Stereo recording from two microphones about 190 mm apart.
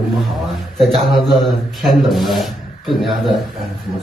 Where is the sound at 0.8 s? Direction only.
Centre (ahead or behind).